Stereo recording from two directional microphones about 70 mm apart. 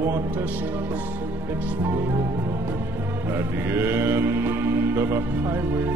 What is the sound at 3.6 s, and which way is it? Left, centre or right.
Music, right.